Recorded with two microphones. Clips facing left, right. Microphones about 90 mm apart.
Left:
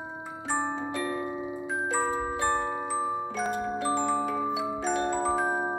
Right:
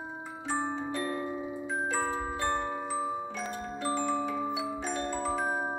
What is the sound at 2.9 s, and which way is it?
Glockenspiel, 30° left (ahead or behind).